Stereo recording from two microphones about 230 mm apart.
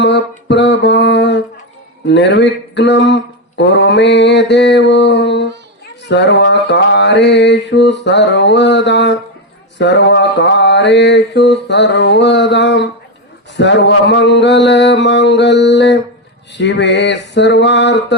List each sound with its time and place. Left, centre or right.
0.0 s mantra: left